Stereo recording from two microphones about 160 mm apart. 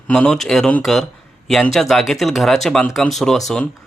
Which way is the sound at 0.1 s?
5° left (ahead or behind).